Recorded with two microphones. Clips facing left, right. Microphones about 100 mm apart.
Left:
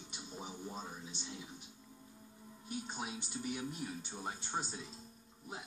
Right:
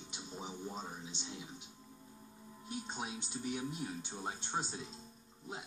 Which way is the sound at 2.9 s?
20° right (ahead or behind).